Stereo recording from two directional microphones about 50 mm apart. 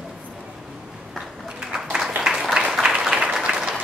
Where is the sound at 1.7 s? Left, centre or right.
Centre.